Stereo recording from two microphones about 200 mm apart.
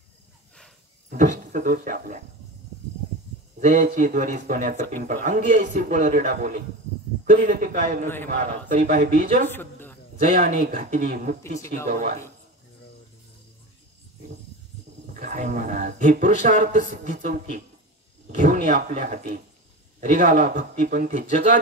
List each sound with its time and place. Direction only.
1.1 s speech: 40° right (ahead or behind)
3.5 s speech: 40° right (ahead or behind)
9.5 s speech: 10° left (ahead or behind)
10.1 s speech: 40° right (ahead or behind)
15.1 s speech: 40° right (ahead or behind)